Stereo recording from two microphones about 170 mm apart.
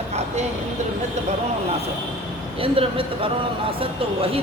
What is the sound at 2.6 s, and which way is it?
Speech, 30° right (ahead or behind).